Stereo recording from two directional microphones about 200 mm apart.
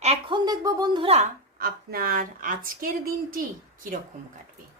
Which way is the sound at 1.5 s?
50° right (ahead or behind).